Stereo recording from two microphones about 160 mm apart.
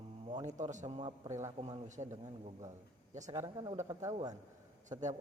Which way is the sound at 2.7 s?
50° right (ahead or behind).